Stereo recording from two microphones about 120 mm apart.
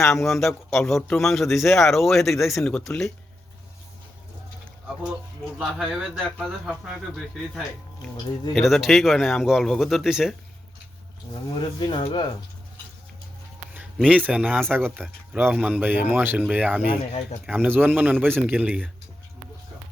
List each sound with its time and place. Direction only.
0.1 s speech: centre (ahead or behind)
5.5 s speech: 5° right (ahead or behind)
8.5 s speech: centre (ahead or behind)
11.6 s speech: 40° left (ahead or behind)
13.7 s a sound: 10° right (ahead or behind)
14.4 s speech: 15° right (ahead or behind)
14.9 s speech: centre (ahead or behind)
15.5 s speech: 10° right (ahead or behind)